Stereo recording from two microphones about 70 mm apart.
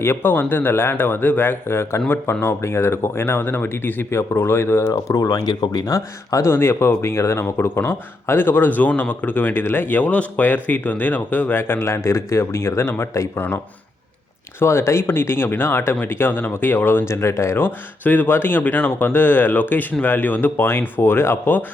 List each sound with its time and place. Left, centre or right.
0.0 s speech: left
5.8 s speech: left
6.5 s speech: left
14.6 s speech: left
17.6 s speech: left